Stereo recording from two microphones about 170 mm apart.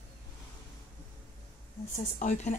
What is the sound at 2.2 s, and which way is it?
Speech, 45° left (ahead or behind).